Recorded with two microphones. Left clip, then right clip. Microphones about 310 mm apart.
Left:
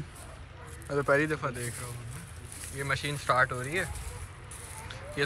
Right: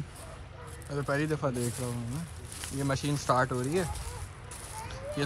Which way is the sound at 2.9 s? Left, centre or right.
Centre.